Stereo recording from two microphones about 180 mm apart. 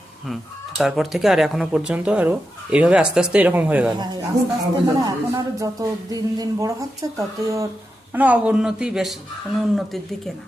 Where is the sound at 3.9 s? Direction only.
25° right (ahead or behind).